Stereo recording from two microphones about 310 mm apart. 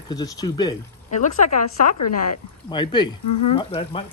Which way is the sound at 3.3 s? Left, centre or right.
Left.